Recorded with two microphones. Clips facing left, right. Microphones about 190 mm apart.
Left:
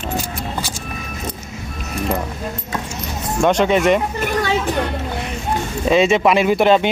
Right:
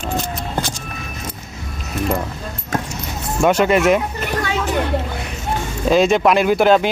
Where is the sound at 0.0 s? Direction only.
5° left (ahead or behind).